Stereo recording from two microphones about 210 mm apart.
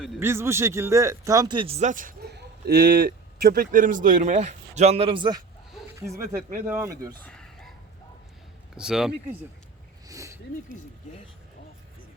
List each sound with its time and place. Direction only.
0.2 s speech: 10° right (ahead or behind)
6.3 s speech: 40° right (ahead or behind)
6.7 s speech: 10° right (ahead or behind)
7.3 s a sound: 5° left (ahead or behind)
8.7 s speech: 5° right (ahead or behind)
10.1 s a sound: 15° right (ahead or behind)